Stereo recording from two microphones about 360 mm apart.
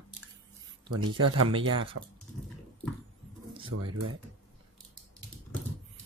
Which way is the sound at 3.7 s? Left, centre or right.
Right.